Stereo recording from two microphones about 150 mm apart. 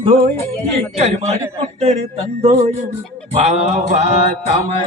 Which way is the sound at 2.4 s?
40° right (ahead or behind).